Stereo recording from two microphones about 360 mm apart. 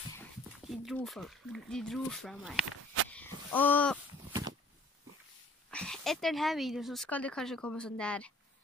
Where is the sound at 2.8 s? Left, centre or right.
Right.